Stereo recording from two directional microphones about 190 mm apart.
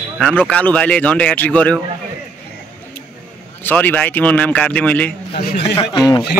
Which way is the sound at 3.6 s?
10° left (ahead or behind).